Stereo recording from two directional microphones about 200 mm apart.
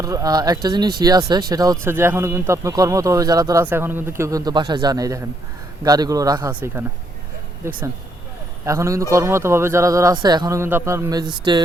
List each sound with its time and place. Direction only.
0.0 s speech: 15° right (ahead or behind)